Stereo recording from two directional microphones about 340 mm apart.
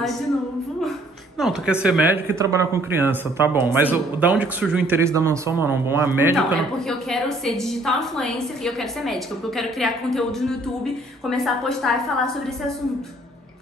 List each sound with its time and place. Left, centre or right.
1.4 s a woman's voice: centre